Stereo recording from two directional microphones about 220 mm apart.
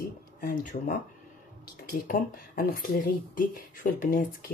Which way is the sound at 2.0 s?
40° left (ahead or behind).